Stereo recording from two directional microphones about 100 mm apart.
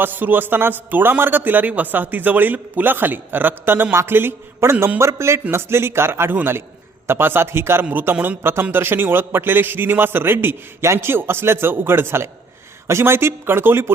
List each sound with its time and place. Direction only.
0.0 s a man's voice: 20° right (ahead or behind)